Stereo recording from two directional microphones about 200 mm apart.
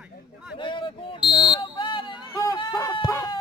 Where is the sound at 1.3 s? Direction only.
25° left (ahead or behind).